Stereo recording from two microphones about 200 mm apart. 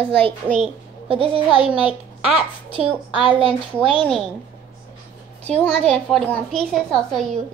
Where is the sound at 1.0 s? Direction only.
25° right (ahead or behind).